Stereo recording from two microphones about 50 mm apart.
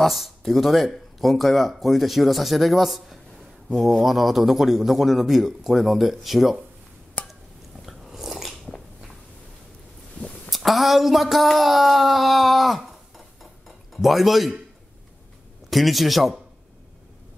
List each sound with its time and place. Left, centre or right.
0.0 s a man's voice: centre
7.2 s a sound: left
7.8 s biting: centre
10.5 s a man's voice: centre
13.4 s dishes: centre
15.7 s a man's voice: centre